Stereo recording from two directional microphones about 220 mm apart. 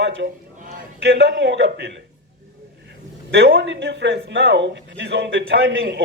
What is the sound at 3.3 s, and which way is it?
Speech, 55° right (ahead or behind).